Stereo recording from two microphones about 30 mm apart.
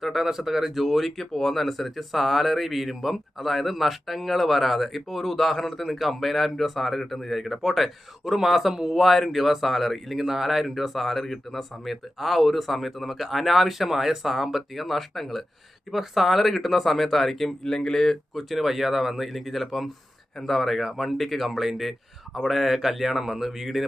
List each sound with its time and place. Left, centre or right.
0.0 s speech: centre
9.0 s speech: centre
10.2 s speech: centre
17.6 s speech: centre
18.3 s speech: centre